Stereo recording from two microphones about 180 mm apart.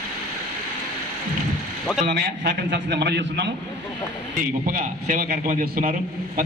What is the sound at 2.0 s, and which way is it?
A man's voice, 65° right (ahead or behind).